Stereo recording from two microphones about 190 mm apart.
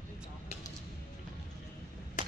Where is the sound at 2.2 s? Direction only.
40° left (ahead or behind).